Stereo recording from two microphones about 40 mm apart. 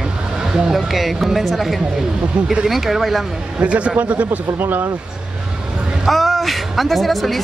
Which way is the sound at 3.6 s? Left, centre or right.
Right.